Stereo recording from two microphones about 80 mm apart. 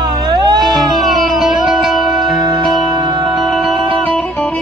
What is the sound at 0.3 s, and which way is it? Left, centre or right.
Music, right.